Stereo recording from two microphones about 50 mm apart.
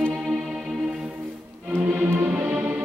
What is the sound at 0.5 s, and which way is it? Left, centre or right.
Music, centre.